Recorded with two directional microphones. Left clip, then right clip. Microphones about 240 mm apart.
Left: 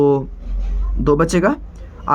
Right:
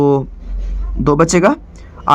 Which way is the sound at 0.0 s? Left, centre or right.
Right.